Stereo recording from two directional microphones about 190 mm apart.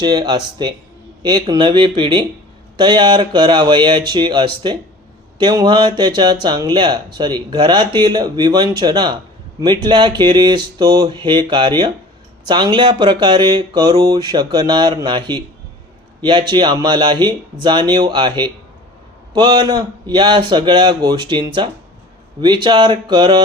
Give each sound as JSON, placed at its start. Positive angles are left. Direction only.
{"t": 0.0, "sound": "speech", "side_deg": -20}